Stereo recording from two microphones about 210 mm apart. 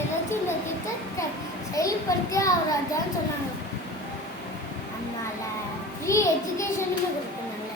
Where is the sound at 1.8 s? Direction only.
15° left (ahead or behind).